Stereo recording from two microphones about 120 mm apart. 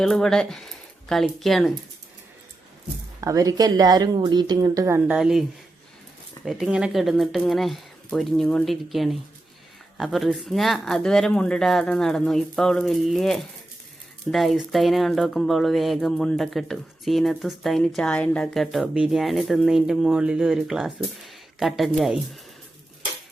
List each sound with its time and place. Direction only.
0.0 s speech: 5° left (ahead or behind)
3.2 s speech: 30° right (ahead or behind)
4.6 s speech: 25° right (ahead or behind)
4.9 s a woman's voice: 10° right (ahead or behind)